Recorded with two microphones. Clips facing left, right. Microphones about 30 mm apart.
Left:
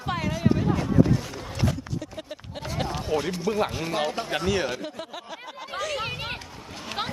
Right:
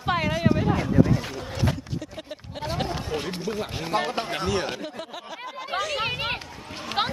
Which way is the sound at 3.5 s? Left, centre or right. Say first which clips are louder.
Left 5 dB; centre.